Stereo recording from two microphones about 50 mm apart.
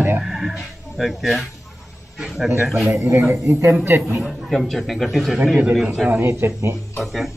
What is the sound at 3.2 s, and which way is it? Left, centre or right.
Speech, right.